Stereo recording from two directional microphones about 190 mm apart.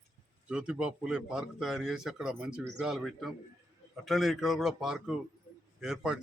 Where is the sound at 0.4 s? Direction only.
5° right (ahead or behind).